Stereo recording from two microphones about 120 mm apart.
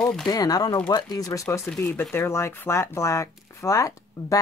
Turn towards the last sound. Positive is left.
turn(degrees=25)  # may be behind; listen again after turning